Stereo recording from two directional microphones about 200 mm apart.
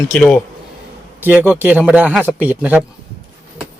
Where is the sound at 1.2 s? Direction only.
10° right (ahead or behind).